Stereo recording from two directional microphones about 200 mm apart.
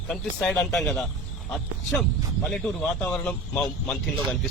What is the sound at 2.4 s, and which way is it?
A man's voice, 5° left (ahead or behind).